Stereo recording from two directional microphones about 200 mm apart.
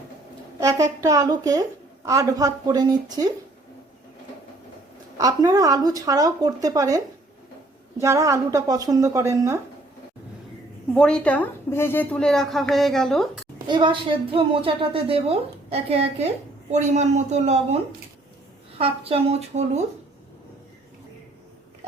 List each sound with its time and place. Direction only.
0.6 s a woman's voice: 15° right (ahead or behind)
5.1 s speech: 20° right (ahead or behind)
8.0 s speech: 15° right (ahead or behind)
10.9 s a woman's voice: 5° left (ahead or behind)
13.7 s a woman's voice: 25° right (ahead or behind)
18.8 s a woman's voice: 30° right (ahead or behind)